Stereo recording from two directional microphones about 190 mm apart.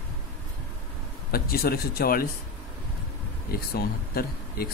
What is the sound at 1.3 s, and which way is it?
Speech, 50° left (ahead or behind).